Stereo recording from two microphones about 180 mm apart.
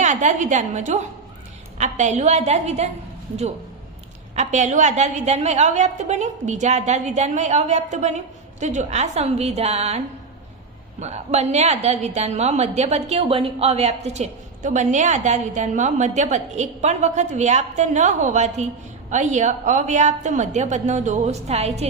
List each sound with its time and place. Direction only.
0.0 s a woman's voice: 40° right (ahead or behind)
4.4 s a woman's voice: 40° right (ahead or behind)
11.0 s a woman's voice: 40° right (ahead or behind)